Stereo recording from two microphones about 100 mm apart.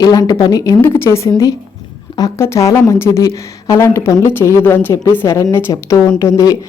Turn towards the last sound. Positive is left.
turn(degrees=35)  # may be behind; listen again after turning